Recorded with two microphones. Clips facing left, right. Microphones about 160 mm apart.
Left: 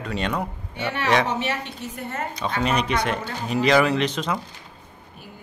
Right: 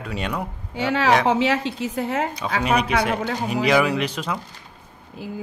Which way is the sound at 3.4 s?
10° right (ahead or behind).